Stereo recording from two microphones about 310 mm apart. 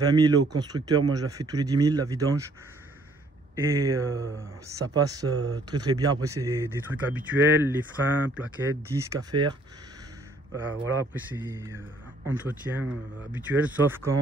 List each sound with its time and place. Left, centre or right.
0.0 s speech: centre
3.5 s speech: centre
4.1 s speech: right
4.6 s speech: centre
8.9 s speech: centre